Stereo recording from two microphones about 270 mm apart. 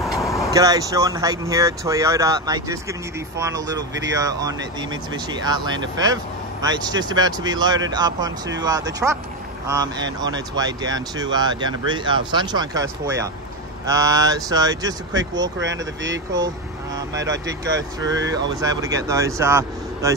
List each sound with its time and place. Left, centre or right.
0.0 s vehicle: centre
0.5 s speech: centre
15.6 s speech: right
18.6 s speech: centre